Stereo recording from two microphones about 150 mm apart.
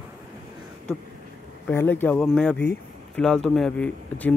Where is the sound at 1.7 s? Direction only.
15° left (ahead or behind).